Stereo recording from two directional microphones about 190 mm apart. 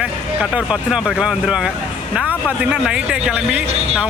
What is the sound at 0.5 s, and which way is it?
Speech, 5° right (ahead or behind).